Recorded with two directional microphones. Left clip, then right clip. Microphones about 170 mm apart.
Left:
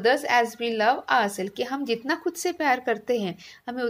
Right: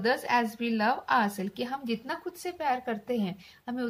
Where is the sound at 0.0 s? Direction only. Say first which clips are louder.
Left 6 dB; 15° left (ahead or behind).